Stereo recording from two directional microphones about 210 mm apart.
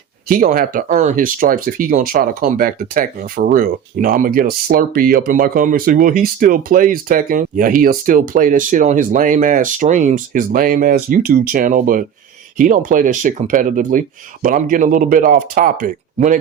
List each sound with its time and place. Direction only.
0.3 s speech: 40° right (ahead or behind)